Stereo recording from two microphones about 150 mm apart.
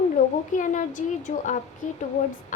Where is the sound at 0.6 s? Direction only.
55° left (ahead or behind).